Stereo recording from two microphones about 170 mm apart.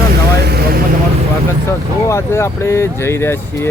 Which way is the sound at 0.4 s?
65° right (ahead or behind).